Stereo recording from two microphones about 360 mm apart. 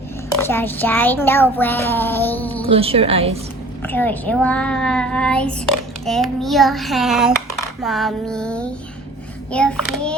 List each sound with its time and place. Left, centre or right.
0.3 s child singing: centre
2.6 s speech: centre
3.8 s child singing: centre